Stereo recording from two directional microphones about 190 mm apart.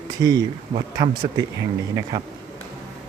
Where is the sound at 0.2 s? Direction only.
20° right (ahead or behind).